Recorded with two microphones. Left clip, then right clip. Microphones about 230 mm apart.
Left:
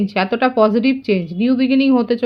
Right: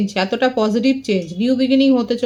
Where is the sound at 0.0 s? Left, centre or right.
Left.